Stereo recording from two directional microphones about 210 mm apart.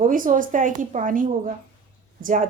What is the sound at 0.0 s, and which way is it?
Speech, 40° right (ahead or behind).